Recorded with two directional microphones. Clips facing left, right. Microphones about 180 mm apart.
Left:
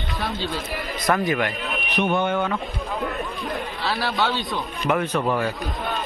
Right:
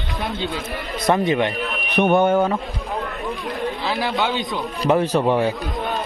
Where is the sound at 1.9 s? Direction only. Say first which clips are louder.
Right 6 dB; 55° right (ahead or behind); by 2.6 s 40° right (ahead or behind).